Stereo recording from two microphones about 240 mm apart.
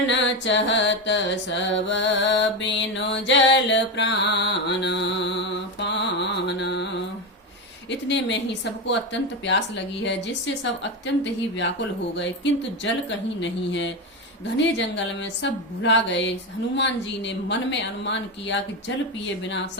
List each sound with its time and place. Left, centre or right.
0.1 s mantra: left
7.9 s speech: left
12.8 s speech: left